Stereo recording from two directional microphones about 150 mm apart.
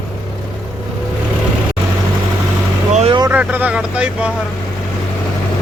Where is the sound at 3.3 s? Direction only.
10° right (ahead or behind).